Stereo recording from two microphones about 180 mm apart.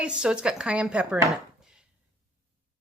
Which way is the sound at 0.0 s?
5° right (ahead or behind).